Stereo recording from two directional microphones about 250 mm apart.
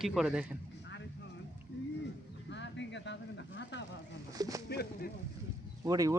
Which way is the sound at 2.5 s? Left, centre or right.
Left.